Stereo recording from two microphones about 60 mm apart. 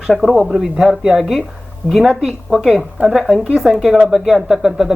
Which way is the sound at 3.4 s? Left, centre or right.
Centre.